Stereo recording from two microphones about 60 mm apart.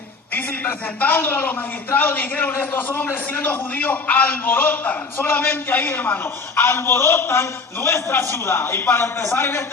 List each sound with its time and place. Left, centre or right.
0.3 s a man's voice: left
6.6 s a man's voice: left